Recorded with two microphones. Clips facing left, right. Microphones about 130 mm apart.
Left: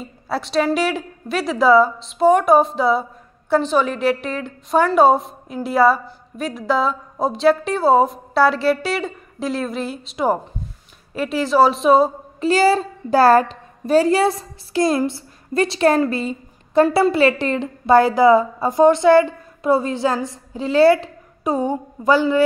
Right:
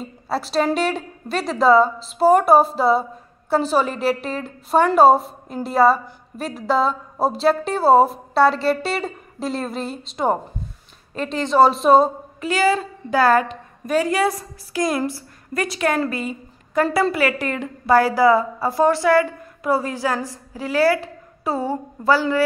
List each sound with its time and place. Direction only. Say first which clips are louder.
0.3 s a woman's voice: left 1 dB; centre (ahead or behind)
12.4 s a woman's voice: left 4 dB; 35° left (ahead or behind)
16.1 s a sound: left 3 dB; 30° left (ahead or behind)
17.1 s a woman's voice: left 5 dB; 25° left (ahead or behind)